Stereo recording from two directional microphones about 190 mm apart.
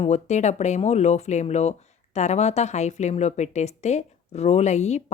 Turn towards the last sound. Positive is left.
turn(degrees=35)  # may be behind; listen again after turning